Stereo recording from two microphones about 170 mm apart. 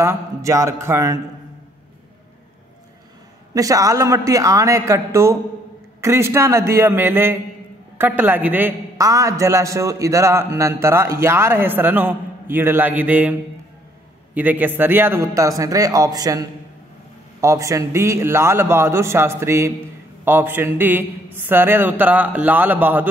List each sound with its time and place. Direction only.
0.0 s a man's voice: 15° right (ahead or behind)
3.5 s a man's voice: 20° right (ahead or behind)